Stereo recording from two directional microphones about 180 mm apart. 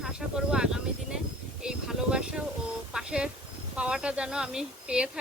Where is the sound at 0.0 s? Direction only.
5° right (ahead or behind).